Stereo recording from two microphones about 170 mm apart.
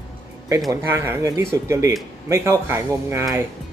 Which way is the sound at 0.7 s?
15° right (ahead or behind).